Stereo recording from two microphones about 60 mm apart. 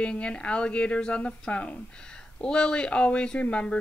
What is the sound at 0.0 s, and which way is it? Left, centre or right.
Speech, centre.